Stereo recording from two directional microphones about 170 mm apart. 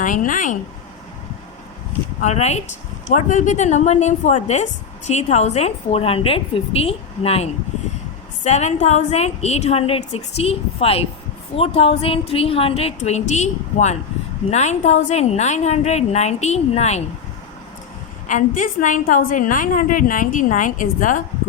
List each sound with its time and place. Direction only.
0.0 s a woman's voice: 50° left (ahead or behind)
2.2 s a woman's voice: 40° left (ahead or behind)
18.3 s a woman's voice: 50° left (ahead or behind)